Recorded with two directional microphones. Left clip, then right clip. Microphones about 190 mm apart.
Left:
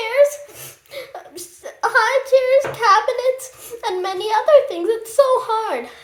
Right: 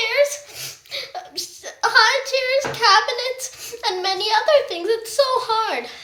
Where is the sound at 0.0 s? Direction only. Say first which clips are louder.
Left 3 dB; 40° left (ahead or behind).